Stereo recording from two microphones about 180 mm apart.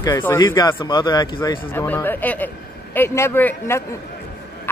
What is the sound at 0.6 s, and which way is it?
Speech, 25° left (ahead or behind).